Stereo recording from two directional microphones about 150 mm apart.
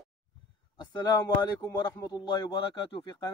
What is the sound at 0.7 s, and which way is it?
Speech, 30° left (ahead or behind).